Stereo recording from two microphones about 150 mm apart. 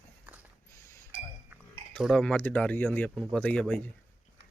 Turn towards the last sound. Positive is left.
turn(degrees=10)  # may be behind; listen again after turning